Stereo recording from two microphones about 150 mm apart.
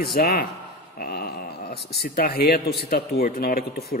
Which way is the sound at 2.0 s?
90° left.